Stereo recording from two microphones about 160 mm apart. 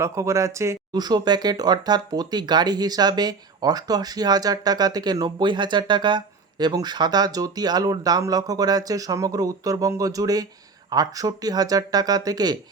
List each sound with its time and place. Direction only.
0.0 s speech: 20° right (ahead or behind)